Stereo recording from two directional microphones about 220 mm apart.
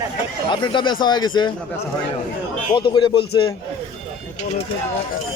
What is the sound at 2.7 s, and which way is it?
Speech, 20° left (ahead or behind).